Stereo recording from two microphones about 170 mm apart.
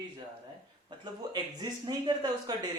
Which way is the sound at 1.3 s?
25° right (ahead or behind).